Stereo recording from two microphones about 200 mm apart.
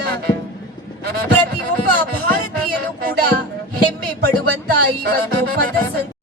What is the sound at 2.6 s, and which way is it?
Speech, 45° right (ahead or behind).